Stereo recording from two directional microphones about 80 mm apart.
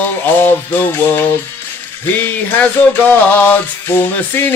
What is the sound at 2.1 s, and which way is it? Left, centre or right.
Music, left.